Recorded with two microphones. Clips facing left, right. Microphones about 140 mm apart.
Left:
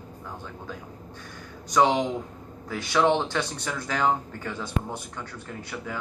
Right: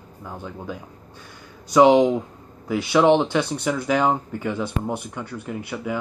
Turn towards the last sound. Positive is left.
turn(degrees=-15)  # may be behind; listen again after turning